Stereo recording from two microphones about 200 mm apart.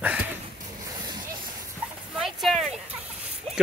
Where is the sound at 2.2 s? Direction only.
Centre (ahead or behind).